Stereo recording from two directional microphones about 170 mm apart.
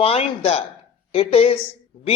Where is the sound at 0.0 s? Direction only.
35° left (ahead or behind).